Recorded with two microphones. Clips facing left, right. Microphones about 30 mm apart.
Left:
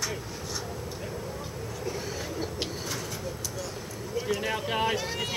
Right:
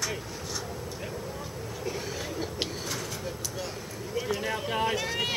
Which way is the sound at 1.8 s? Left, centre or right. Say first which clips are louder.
Even; centre.